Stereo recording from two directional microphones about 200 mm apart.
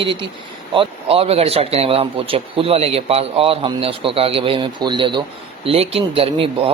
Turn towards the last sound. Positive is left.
turn(degrees=-25)  # may be behind; listen again after turning